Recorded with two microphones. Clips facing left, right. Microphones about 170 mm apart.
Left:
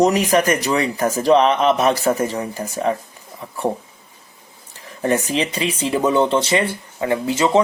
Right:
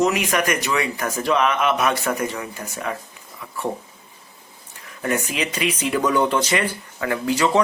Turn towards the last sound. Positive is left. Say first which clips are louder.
# left 2 dB
turn(degrees=25)  # may be behind; listen again after turning